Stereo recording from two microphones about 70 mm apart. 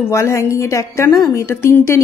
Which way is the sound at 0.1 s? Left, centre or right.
Left.